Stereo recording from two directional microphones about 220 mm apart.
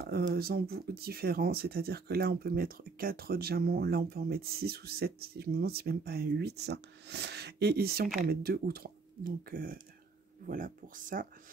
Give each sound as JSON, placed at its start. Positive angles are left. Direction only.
{"t": 0.3, "sound": "speech", "side_deg": -45}